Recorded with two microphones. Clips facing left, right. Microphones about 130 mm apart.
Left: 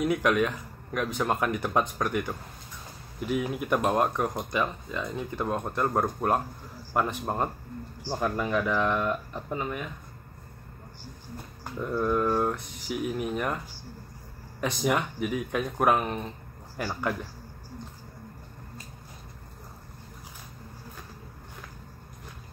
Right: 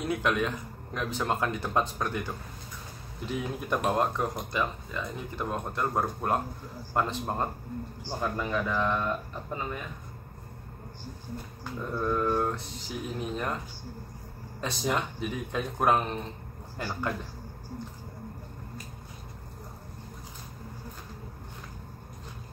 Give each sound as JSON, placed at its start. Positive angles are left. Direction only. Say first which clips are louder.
{"t": 0.0, "sound": "speech", "louder": "left 4 dB", "side_deg": 15}
{"t": 11.9, "sound": "speech", "louder": "left 2 dB", "side_deg": 15}
{"t": 14.6, "sound": "speech", "louder": "left 3 dB", "side_deg": 15}